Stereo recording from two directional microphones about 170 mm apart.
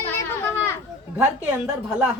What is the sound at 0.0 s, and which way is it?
Children playing, 15° left (ahead or behind).